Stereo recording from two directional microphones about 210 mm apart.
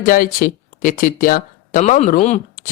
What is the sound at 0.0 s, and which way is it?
Speech, 40° left (ahead or behind).